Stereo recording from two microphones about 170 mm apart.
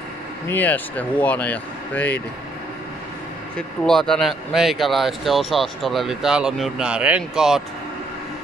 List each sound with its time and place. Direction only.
0.5 s speech: 10° left (ahead or behind)
3.5 s speech: 5° left (ahead or behind)